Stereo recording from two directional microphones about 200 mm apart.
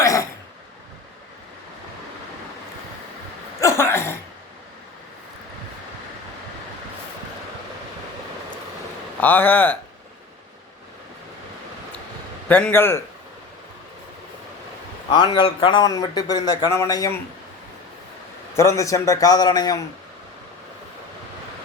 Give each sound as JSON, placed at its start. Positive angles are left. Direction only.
{"t": 3.6, "sound": "a sound", "side_deg": 15}
{"t": 9.2, "sound": "a man's voice", "side_deg": 10}
{"t": 12.5, "sound": "a man's voice", "side_deg": 5}
{"t": 15.1, "sound": "a man's voice", "side_deg": 20}
{"t": 18.5, "sound": "a man's voice", "side_deg": 15}